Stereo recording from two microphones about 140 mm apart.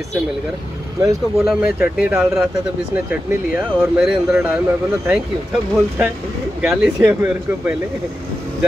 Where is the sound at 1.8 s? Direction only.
5° right (ahead or behind).